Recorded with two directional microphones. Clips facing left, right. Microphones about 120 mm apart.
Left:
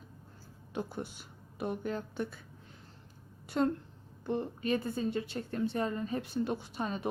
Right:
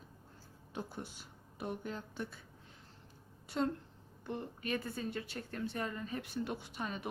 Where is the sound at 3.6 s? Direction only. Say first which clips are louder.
Left 5 dB; 55° left (ahead or behind).